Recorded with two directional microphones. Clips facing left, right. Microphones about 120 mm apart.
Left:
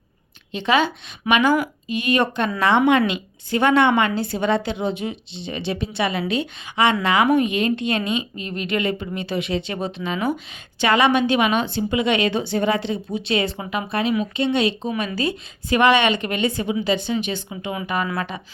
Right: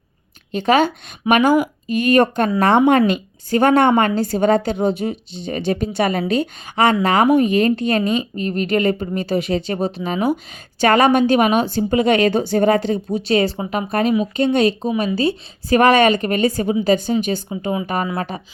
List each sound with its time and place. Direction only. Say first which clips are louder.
0.5 s a woman's voice: right 4 dB; 45° right (ahead or behind)